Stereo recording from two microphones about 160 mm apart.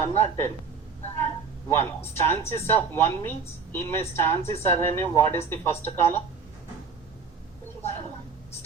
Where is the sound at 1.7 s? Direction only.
15° left (ahead or behind).